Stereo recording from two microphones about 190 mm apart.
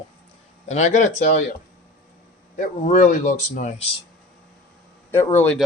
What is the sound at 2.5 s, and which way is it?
Speech, 45° left (ahead or behind).